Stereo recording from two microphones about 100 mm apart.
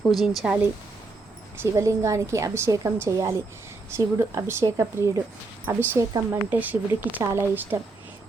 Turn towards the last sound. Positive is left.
turn(degrees=-20)  # may be behind; listen again after turning